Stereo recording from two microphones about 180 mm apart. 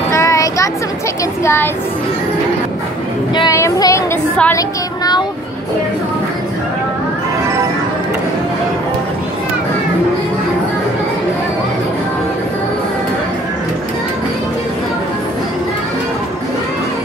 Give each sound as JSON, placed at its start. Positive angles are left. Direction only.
{"t": 0.1, "sound": "a sound", "side_deg": 15}
{"t": 1.4, "sound": "speech", "side_deg": 15}
{"t": 3.3, "sound": "speech", "side_deg": 20}